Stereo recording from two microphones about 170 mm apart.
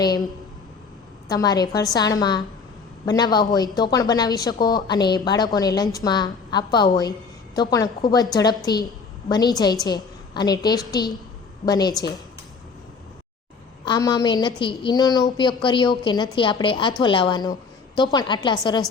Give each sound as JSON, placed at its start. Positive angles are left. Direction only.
{"t": 0.0, "sound": "a woman's voice", "side_deg": 25}
{"t": 1.3, "sound": "a woman's voice", "side_deg": 25}
{"t": 13.8, "sound": "a woman's voice", "side_deg": 25}